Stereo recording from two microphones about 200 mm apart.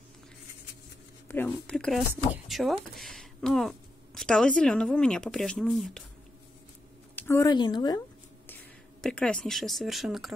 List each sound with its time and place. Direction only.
1.3 s speech: 10° left (ahead or behind)
7.2 s speech: 15° left (ahead or behind)
9.0 s speech: 5° left (ahead or behind)